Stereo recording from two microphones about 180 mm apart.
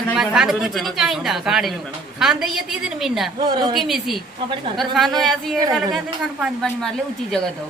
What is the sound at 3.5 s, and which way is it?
Speech, 25° right (ahead or behind).